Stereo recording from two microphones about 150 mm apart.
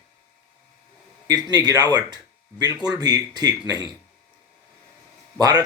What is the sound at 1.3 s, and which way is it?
Speech, 25° right (ahead or behind).